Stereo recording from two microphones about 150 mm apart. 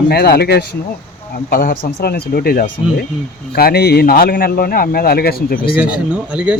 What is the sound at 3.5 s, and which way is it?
A man's voice, 90° left.